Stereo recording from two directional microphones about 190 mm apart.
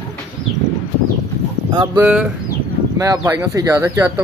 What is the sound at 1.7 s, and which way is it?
Speech, 20° right (ahead or behind).